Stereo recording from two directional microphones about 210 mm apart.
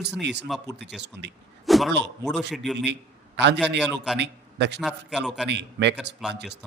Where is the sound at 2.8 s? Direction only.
55° right (ahead or behind).